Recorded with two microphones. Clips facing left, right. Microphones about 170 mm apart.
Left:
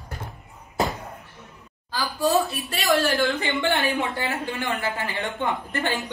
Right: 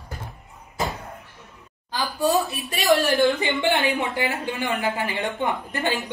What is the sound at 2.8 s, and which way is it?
A woman's voice, 20° right (ahead or behind).